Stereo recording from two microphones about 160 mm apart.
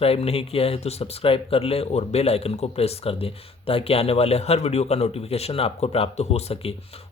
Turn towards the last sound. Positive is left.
turn(degrees=40)  # may be behind; listen again after turning